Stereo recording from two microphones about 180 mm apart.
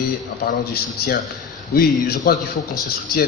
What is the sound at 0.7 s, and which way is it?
Speech, 60° left (ahead or behind).